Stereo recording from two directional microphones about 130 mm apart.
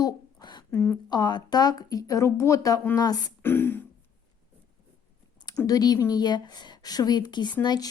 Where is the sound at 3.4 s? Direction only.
15° left (ahead or behind).